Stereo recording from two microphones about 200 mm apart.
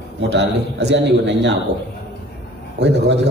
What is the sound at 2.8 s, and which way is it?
Speech, 60° right (ahead or behind).